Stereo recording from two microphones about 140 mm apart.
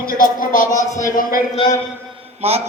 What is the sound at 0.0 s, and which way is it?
Speech, 85° left.